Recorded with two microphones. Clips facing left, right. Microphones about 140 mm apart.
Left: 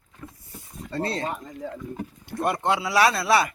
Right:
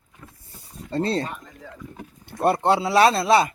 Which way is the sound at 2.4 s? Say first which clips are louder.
Right 5 dB; 30° right (ahead or behind).